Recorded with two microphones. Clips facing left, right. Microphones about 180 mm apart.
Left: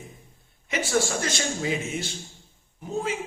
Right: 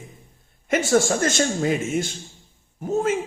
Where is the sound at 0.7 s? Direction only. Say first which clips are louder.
Right 6 dB; 50° right (ahead or behind).